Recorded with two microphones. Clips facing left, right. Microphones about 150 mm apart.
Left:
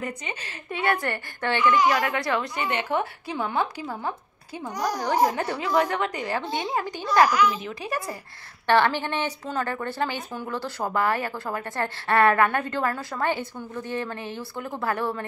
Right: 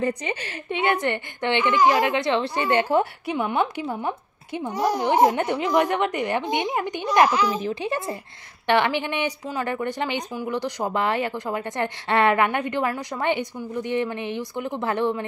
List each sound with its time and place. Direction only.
0.0 s a woman's voice: 30° right (ahead or behind)
3.3 s a woman's voice: 20° right (ahead or behind)
7.4 s a woman's voice: 35° right (ahead or behind)